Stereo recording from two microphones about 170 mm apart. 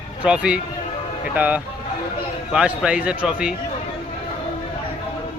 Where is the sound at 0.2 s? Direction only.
5° right (ahead or behind).